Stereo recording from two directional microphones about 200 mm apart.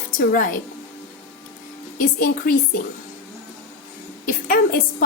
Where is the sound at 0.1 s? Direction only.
45° left (ahead or behind).